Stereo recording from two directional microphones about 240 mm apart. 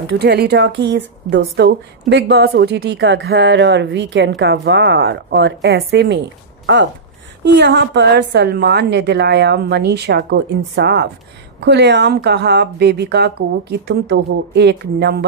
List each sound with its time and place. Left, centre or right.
0.2 s a woman's voice: right